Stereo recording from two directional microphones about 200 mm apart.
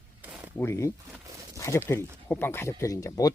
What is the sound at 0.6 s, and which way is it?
Speech, 15° left (ahead or behind).